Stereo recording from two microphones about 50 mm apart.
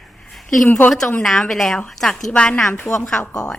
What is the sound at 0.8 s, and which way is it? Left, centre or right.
Speech, left.